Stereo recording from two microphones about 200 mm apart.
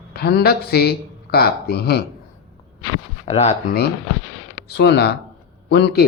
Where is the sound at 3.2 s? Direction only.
35° left (ahead or behind).